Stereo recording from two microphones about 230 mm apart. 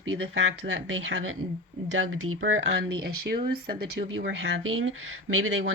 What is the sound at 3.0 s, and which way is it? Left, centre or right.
Speech, right.